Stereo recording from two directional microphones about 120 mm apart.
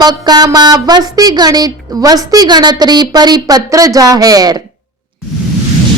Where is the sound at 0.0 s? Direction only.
35° right (ahead or behind).